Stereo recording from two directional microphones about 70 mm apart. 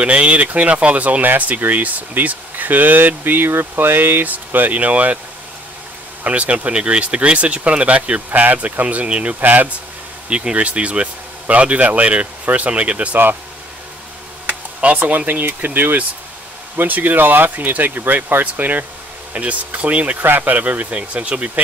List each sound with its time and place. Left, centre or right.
0.0 s speech: centre
6.2 s speech: centre
14.8 s speech: right